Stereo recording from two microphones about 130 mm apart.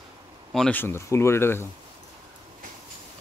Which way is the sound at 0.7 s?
20° left (ahead or behind).